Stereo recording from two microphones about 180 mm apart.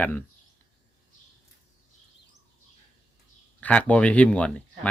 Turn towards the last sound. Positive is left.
turn(degrees=5)  # may be behind; listen again after turning